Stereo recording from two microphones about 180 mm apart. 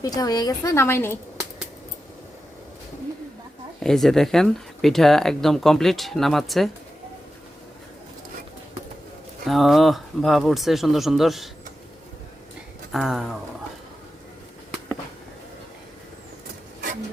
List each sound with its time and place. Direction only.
0.0 s a woman's voice: 20° left (ahead or behind)
3.8 s speech: centre (ahead or behind)
9.5 s speech: centre (ahead or behind)
12.9 s speech: centre (ahead or behind)